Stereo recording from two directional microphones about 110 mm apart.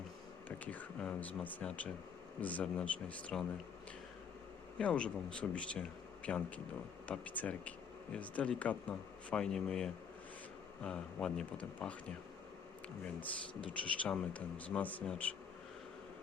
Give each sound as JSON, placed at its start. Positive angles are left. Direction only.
{"t": 0.4, "sound": "speech", "side_deg": 15}
{"t": 4.8, "sound": "speech", "side_deg": 10}
{"t": 13.1, "sound": "speech", "side_deg": 50}
{"t": 14.0, "sound": "speech", "side_deg": 10}